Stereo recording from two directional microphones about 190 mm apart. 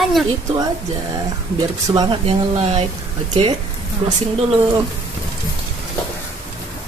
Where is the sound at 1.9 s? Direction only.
30° right (ahead or behind).